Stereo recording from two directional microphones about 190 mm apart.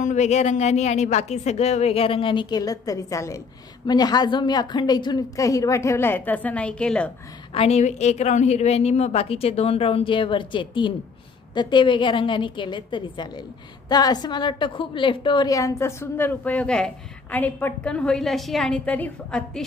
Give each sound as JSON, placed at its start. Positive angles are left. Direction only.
{"t": 0.0, "sound": "a woman's voice", "side_deg": 40}
{"t": 7.5, "sound": "a woman's voice", "side_deg": 35}